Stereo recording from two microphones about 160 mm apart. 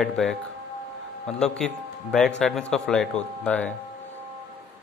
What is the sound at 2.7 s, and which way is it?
Speech, 5° left (ahead or behind).